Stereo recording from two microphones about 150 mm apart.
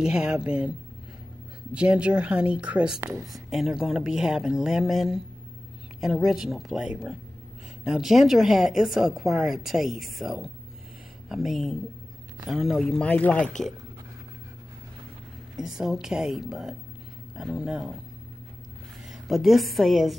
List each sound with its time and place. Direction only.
0.0 s speech: 5° right (ahead or behind)
3.0 s a woman's voice: 20° right (ahead or behind)
3.4 s a woman's voice: centre (ahead or behind)
15.5 s a woman's voice: 5° right (ahead or behind)
19.2 s a woman's voice: centre (ahead or behind)